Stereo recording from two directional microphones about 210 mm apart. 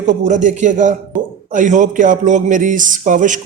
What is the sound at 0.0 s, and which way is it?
Speech, 35° right (ahead or behind).